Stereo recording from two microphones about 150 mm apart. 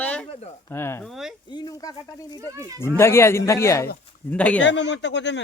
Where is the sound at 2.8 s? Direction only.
15° left (ahead or behind).